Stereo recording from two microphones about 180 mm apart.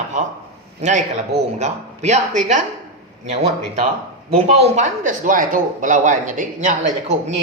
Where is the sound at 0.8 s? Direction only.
40° right (ahead or behind).